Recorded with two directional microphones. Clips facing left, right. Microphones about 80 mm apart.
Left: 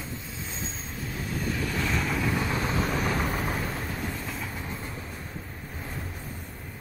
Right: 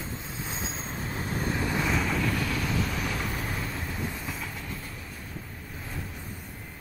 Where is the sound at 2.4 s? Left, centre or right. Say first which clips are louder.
Left 2 dB; left.